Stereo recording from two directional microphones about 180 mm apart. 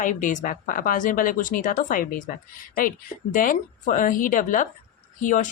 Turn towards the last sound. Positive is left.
turn(degrees=45)  # may be behind; listen again after turning